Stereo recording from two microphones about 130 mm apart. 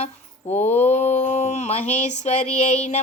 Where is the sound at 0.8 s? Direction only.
60° left (ahead or behind).